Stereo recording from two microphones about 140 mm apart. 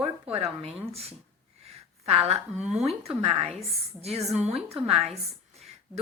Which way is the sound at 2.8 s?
45° right (ahead or behind).